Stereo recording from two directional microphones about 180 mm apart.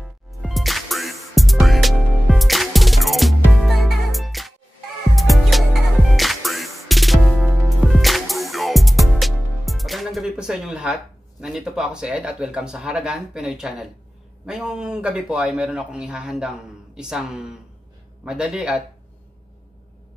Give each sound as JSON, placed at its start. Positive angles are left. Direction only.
{"t": 0.0, "sound": "music", "side_deg": 0}
{"t": 11.4, "sound": "a man's voice", "side_deg": -5}